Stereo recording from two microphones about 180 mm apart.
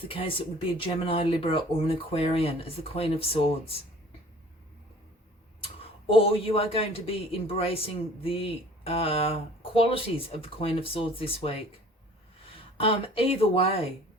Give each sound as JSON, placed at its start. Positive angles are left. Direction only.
{"t": 0.0, "sound": "speech", "side_deg": 30}
{"t": 5.5, "sound": "speech", "side_deg": 30}
{"t": 12.7, "sound": "speech", "side_deg": 30}